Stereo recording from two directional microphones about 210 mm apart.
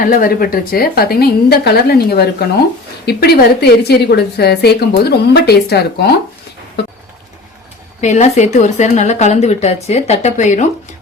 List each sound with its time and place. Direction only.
0.0 s a woman's voice: 40° left (ahead or behind)
8.0 s speech: 35° left (ahead or behind)